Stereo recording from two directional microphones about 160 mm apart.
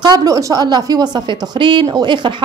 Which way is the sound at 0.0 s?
25° right (ahead or behind).